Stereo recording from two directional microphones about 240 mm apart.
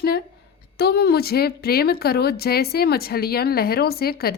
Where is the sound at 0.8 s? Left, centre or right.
Left.